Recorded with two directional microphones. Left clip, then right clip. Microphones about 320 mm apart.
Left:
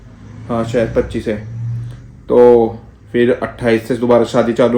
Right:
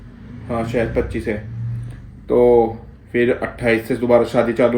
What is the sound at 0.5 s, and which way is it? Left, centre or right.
Speech, centre.